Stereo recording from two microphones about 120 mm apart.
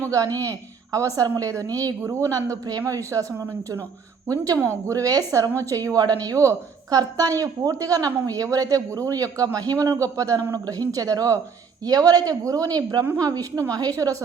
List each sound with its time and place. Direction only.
0.0 s a woman's voice: 30° right (ahead or behind)
4.6 s a woman's voice: 25° right (ahead or behind)